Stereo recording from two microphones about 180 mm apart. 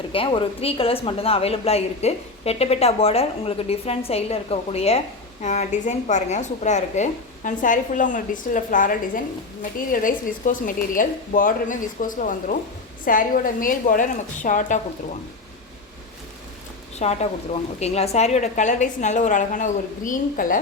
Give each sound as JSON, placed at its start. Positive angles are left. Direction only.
{"t": 0.1, "sound": "a woman's voice", "side_deg": 30}
{"t": 17.0, "sound": "a woman's voice", "side_deg": 35}